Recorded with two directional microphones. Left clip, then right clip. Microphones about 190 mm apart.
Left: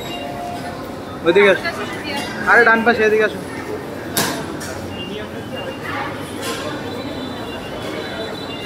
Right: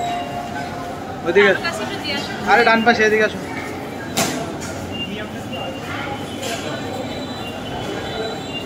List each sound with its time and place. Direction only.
1.2 s a man's voice: 20° left (ahead or behind)